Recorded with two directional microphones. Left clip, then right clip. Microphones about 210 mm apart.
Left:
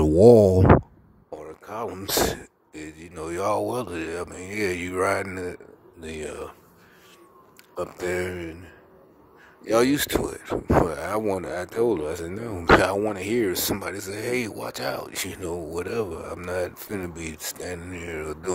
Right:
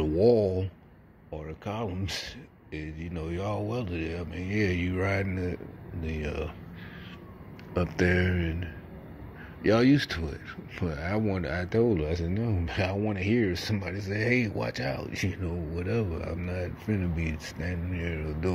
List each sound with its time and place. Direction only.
0.0 s speech: 35° left (ahead or behind)
7.8 s speech: 35° left (ahead or behind)
9.7 s speech: 35° left (ahead or behind)